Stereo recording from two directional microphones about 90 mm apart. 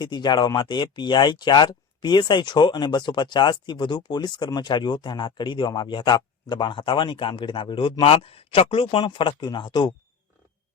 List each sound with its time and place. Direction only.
0.0 s speech: 55° left (ahead or behind); by 7.9 s 75° left (ahead or behind)
8.0 s speech: 90° left; by 9.5 s 65° left (ahead or behind)
9.5 s speech: 55° left (ahead or behind)